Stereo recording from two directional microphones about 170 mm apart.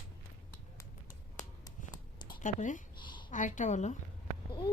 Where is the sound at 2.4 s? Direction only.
45° left (ahead or behind).